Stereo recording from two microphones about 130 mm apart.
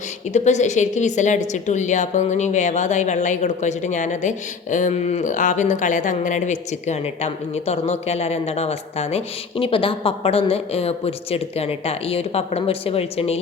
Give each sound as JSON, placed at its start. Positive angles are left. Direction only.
{"t": 0.3, "sound": "a woman's voice", "side_deg": 65}